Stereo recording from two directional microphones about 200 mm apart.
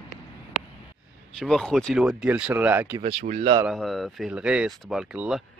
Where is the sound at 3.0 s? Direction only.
30° right (ahead or behind).